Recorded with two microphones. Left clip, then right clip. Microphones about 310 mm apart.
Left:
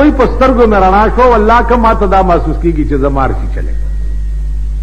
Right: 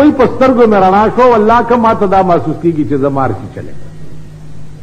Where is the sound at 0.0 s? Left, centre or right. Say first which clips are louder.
Even; left.